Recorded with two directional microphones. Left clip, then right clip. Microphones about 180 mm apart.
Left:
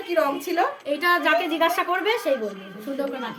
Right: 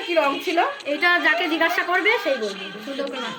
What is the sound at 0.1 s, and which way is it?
Speech, 25° right (ahead or behind).